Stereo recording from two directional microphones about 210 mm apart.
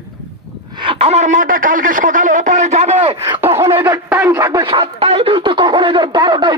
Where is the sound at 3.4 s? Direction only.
15° right (ahead or behind).